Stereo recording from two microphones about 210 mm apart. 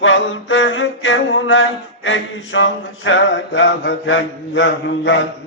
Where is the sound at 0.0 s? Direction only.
65° left (ahead or behind).